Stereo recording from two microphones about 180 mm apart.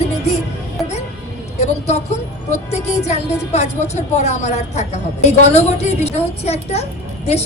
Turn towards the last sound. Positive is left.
turn(degrees=35)  # may be behind; listen again after turning